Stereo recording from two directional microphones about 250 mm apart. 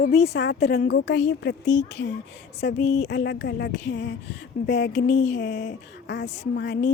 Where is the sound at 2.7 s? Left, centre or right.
Left.